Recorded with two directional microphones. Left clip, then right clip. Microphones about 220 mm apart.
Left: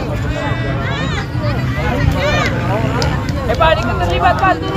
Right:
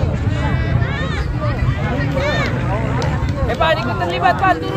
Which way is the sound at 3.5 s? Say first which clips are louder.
Left 4 dB; 50° right (ahead or behind).